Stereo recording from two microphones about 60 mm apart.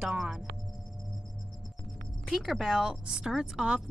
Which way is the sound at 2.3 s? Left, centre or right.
Centre.